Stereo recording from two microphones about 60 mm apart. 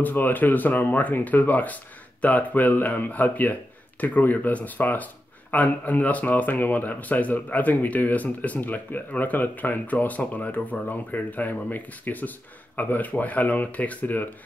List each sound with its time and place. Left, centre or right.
0.0 s speech: left